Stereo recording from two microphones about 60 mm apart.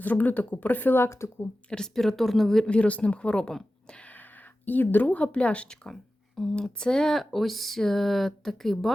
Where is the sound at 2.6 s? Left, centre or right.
Centre.